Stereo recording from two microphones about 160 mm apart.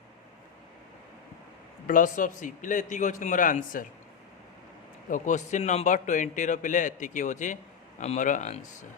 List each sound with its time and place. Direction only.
1.9 s a man's voice: 55° left (ahead or behind)
5.0 s a man's voice: 55° left (ahead or behind)